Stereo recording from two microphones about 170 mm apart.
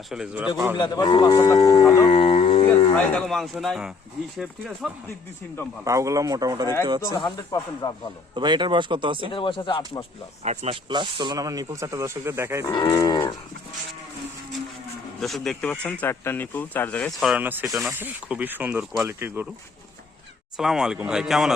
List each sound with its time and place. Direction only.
0.1 s a man's voice: 5° right (ahead or behind)
0.8 s speech: 25° left (ahead or behind)
2.0 s howl: 35° left (ahead or behind)
3.0 s a man's voice: 5° left (ahead or behind)
5.8 s speech: 20° right (ahead or behind)
7.1 s speech: 25° left (ahead or behind)
8.4 s speech: 25° right (ahead or behind)
9.3 s speech: 30° left (ahead or behind)
10.4 s speech: 40° right (ahead or behind)
10.8 s speech: 25° right (ahead or behind)
12.6 s speech: 20° left (ahead or behind)
15.2 s speech: centre (ahead or behind)
17.4 s speech: 10° right (ahead or behind)
20.6 s a man's voice: 5° right (ahead or behind)